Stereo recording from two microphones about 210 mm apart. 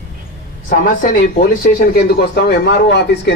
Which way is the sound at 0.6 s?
40° left (ahead or behind).